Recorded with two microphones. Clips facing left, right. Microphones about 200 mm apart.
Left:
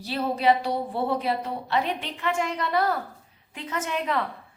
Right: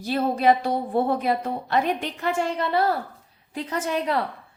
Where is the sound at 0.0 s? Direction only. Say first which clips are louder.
Right 3 dB; 50° right (ahead or behind).